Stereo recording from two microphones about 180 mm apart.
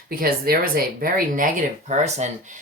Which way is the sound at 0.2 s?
55° right (ahead or behind).